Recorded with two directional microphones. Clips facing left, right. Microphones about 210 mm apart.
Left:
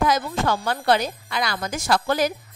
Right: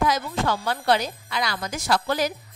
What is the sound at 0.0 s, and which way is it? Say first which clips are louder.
Speech: left 2 dB; 50° left (ahead or behind).